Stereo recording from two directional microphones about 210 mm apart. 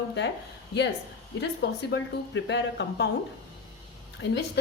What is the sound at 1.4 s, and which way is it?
A woman's voice, 60° left (ahead or behind).